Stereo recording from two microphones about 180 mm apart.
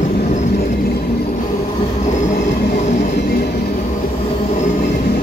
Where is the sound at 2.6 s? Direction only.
45° left (ahead or behind).